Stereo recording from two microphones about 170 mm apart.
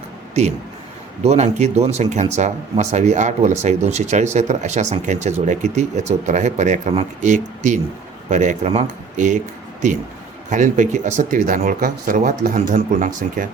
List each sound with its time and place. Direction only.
1.2 s speech: 40° right (ahead or behind)
10.5 s speech: 45° right (ahead or behind)